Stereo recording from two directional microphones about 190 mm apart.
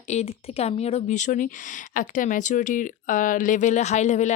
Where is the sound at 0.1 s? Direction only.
35° left (ahead or behind).